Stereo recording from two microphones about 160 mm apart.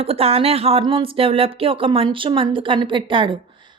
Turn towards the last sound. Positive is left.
turn(degrees=-30)  # may be behind; listen again after turning